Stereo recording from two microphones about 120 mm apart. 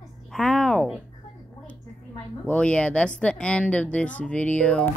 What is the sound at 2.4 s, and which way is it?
Speech, 10° left (ahead or behind).